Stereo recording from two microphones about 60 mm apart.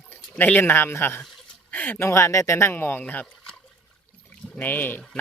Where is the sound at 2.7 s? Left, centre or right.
Left.